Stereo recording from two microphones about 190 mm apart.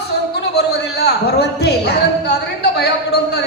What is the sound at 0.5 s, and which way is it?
A man's voice, 60° left (ahead or behind).